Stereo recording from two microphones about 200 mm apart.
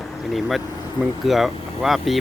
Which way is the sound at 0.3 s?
Centre (ahead or behind).